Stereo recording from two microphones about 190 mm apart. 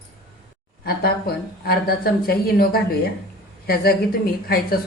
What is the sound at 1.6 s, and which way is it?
A woman's voice, 55° left (ahead or behind).